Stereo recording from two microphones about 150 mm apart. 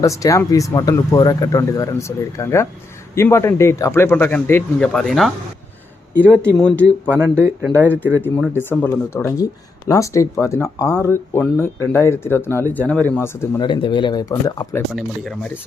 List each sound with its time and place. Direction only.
0.0 s speech: 20° left (ahead or behind); by 5.3 s centre (ahead or behind)
6.1 s speech: 15° right (ahead or behind)
6.6 s speech: 10° left (ahead or behind)
7.1 s speech: 15° right (ahead or behind)
8.5 s speech: 15° left (ahead or behind)
13.6 s speech: 35° left (ahead or behind)
14.9 s speech: centre (ahead or behind)